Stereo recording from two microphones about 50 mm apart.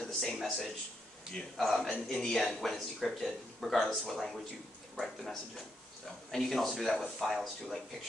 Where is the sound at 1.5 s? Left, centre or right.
Centre.